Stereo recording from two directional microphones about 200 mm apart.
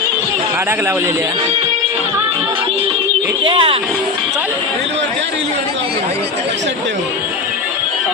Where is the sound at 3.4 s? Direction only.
25° right (ahead or behind).